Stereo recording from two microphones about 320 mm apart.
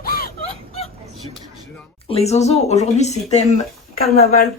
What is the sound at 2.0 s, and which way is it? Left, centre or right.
Speech, centre.